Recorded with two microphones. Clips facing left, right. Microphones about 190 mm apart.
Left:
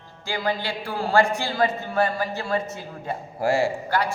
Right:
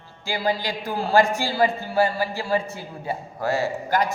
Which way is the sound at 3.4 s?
10° left (ahead or behind).